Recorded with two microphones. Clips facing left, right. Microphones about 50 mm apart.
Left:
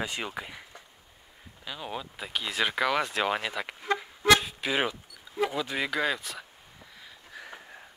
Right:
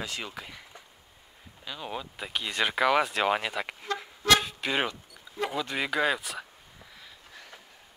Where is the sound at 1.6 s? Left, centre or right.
Centre.